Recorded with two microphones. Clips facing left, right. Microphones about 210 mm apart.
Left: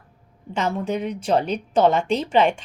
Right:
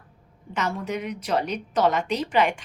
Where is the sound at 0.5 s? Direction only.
30° left (ahead or behind).